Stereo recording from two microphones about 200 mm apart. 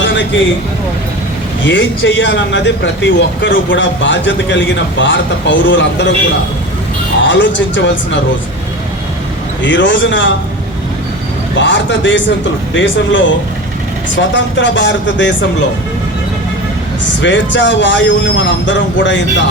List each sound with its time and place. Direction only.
0.0 s vehicle: 65° left (ahead or behind)
1.6 s speech: 65° left (ahead or behind)
7.3 s speech: 65° left (ahead or behind)
9.6 s speech: 65° left (ahead or behind)
11.5 s speech: 65° left (ahead or behind)
17.2 s speech: 65° left (ahead or behind)